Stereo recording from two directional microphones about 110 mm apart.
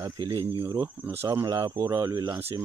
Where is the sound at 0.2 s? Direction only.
40° right (ahead or behind).